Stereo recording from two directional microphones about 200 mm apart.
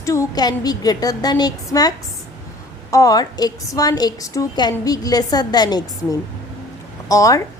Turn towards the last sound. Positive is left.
turn(degrees=15)  # may be behind; listen again after turning